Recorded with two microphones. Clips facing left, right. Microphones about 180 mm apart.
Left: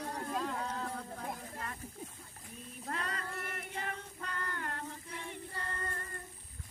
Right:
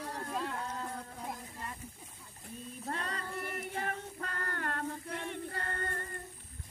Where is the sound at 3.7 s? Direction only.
45° right (ahead or behind).